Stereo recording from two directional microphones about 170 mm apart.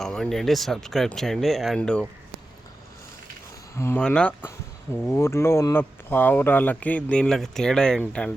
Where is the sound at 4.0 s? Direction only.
5° left (ahead or behind).